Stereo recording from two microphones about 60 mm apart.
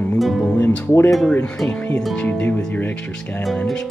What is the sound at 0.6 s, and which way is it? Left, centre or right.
Speech, left.